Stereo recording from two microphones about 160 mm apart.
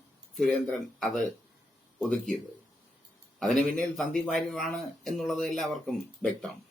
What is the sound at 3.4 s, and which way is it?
Speech, centre (ahead or behind).